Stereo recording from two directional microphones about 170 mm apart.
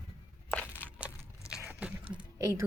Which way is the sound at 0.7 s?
10° right (ahead or behind).